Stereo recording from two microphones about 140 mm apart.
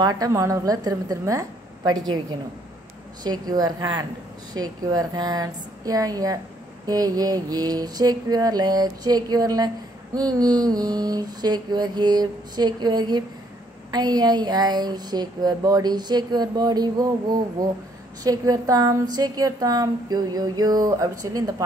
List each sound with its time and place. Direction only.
0.0 s speech: 25° right (ahead or behind)
3.3 s speech: 30° right (ahead or behind)